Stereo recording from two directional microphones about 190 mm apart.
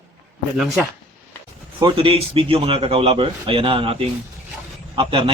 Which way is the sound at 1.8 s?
30° right (ahead or behind).